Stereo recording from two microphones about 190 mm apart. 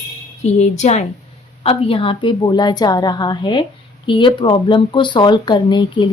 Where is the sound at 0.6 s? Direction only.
35° left (ahead or behind).